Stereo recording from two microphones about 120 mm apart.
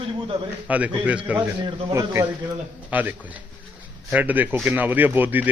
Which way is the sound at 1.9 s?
20° right (ahead or behind).